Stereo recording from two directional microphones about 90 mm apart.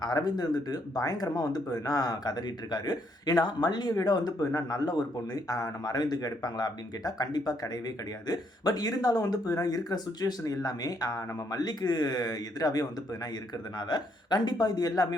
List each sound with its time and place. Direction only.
0.0 s speech: 50° left (ahead or behind)